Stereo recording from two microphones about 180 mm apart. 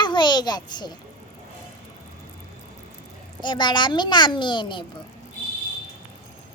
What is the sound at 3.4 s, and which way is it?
A child's voice, 25° left (ahead or behind).